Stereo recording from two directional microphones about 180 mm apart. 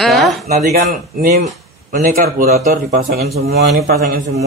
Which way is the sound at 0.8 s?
50° right (ahead or behind).